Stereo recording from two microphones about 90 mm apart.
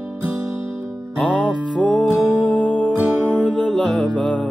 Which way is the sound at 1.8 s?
15° left (ahead or behind).